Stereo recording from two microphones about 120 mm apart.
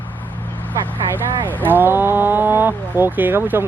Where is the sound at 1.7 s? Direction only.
15° right (ahead or behind).